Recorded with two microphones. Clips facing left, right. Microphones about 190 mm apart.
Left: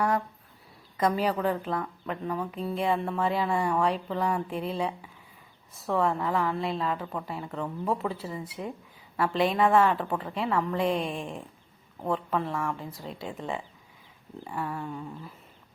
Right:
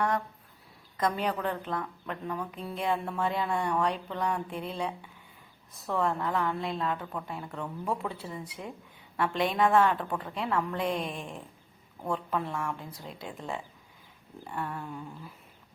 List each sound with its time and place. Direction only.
0.9 s a woman's voice: 5° left (ahead or behind)
11.0 s speech: 30° left (ahead or behind)
12.1 s a woman's voice: centre (ahead or behind)